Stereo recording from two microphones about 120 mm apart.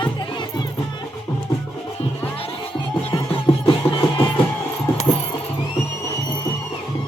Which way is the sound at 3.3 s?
40° left (ahead or behind).